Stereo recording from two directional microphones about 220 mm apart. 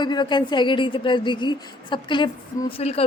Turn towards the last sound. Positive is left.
turn(degrees=25)  # may be behind; listen again after turning